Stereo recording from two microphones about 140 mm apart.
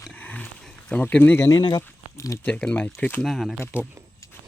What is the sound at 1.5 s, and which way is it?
Speech, 30° left (ahead or behind).